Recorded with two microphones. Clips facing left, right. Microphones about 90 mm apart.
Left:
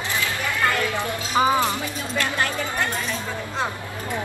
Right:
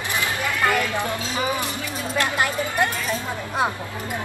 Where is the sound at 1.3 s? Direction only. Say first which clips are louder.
Left 8 dB; 25° left (ahead or behind).